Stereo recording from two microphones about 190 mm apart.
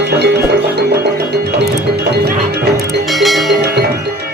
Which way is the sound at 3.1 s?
Centre (ahead or behind).